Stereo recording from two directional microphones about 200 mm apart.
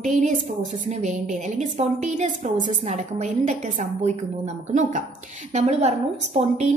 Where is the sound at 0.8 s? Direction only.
35° right (ahead or behind).